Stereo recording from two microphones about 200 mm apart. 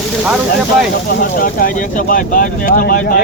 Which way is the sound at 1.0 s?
45° left (ahead or behind).